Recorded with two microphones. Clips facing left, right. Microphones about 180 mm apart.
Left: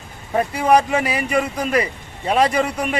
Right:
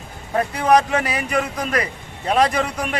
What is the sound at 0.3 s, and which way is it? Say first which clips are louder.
A man's voice: left 1 dB; 5° left (ahead or behind).